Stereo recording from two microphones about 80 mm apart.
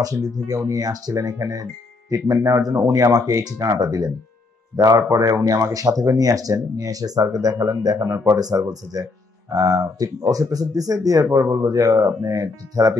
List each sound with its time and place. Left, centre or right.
0.0 s speech: right